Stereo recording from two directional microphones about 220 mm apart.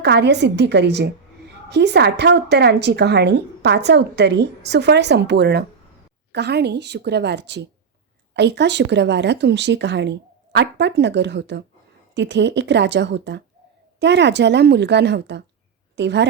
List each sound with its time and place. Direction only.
0.0 s a woman's voice: 50° right (ahead or behind)